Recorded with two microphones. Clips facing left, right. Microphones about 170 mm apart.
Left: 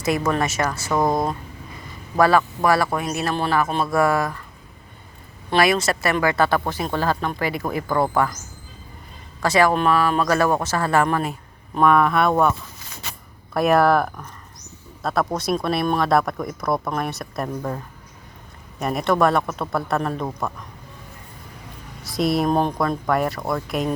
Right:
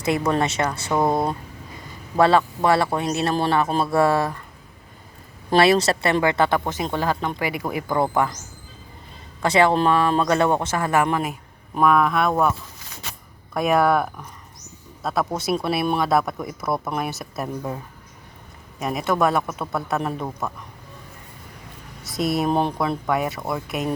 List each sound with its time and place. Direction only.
0.3 s speech: 25° right (ahead or behind)
0.9 s speech: 5° right (ahead or behind)
2.1 s speech: 25° right (ahead or behind)
5.5 s speech: 35° right (ahead or behind); by 8.3 s 20° right (ahead or behind)
9.4 s speech: 25° right (ahead or behind)
11.3 s speech: 5° right (ahead or behind)
18.8 s speech: centre (ahead or behind)
22.0 s speech: centre (ahead or behind)